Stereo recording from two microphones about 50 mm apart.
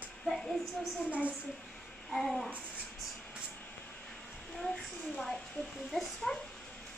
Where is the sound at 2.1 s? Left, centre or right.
Centre.